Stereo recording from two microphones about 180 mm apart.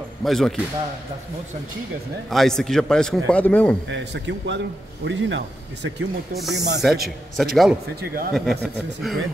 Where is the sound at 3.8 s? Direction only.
85° right.